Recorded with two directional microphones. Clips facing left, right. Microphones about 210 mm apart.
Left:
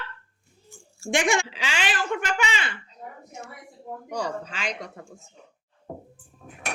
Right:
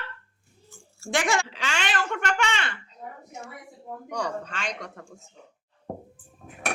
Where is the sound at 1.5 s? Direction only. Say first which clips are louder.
Even; 5° left (ahead or behind).